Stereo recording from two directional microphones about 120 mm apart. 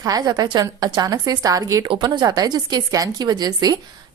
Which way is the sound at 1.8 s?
45° right (ahead or behind).